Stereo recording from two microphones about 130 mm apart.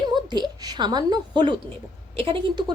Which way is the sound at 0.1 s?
35° right (ahead or behind).